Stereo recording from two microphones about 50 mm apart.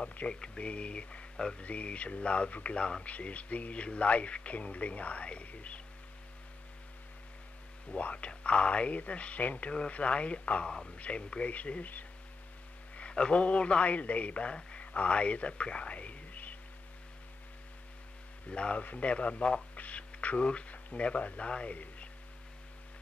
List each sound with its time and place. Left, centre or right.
0.1 s speech: left
7.9 s speech: left
12.9 s a man's voice: left
18.5 s speech: left